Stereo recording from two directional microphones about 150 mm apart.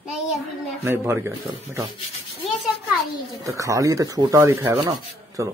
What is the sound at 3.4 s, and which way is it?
Rub, 20° right (ahead or behind).